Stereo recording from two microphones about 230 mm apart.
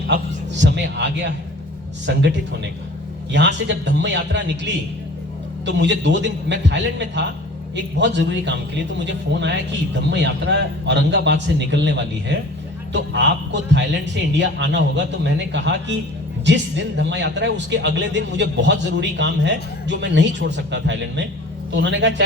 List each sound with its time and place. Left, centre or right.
0.1 s speech: right
3.3 s speech: right